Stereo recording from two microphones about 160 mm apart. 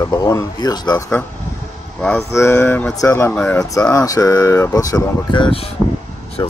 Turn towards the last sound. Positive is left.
turn(degrees=25)  # may be behind; listen again after turning